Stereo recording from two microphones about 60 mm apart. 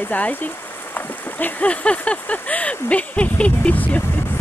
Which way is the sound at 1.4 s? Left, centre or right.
Left.